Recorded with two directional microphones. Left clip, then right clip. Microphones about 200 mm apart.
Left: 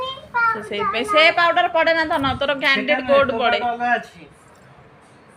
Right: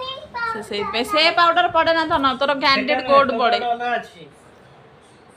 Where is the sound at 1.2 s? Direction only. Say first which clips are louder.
Even; centre (ahead or behind).